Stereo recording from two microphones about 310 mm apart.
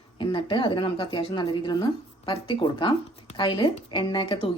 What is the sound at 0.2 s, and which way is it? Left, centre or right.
A woman's voice, centre.